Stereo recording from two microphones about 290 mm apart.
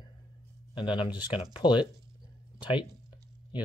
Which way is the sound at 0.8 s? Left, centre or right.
Centre.